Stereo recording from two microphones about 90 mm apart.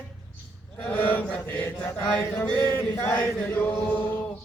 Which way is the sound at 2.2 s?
30° left (ahead or behind).